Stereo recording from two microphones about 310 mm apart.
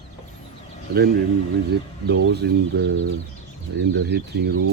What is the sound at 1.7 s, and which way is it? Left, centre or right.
Speech, right.